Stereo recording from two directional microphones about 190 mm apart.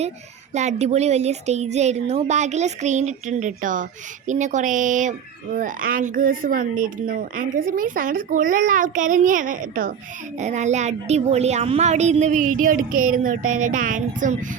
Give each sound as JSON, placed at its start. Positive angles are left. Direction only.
{"t": 0.5, "sound": "speech", "side_deg": -35}